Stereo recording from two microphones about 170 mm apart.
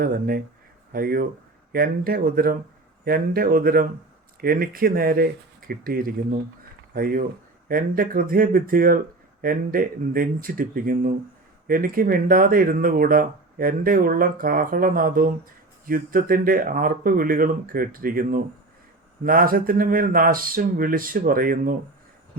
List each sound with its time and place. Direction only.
0.0 s speech: 60° right (ahead or behind)